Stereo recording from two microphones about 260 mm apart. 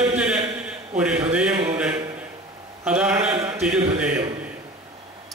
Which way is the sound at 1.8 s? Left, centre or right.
Centre.